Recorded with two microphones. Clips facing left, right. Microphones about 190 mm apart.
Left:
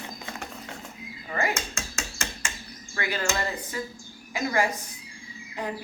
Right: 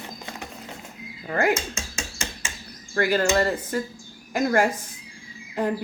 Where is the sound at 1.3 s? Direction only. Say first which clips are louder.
Right 6 dB; 60° right (ahead or behind).